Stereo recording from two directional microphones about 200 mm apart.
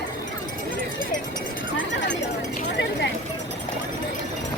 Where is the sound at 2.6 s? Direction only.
60° left (ahead or behind).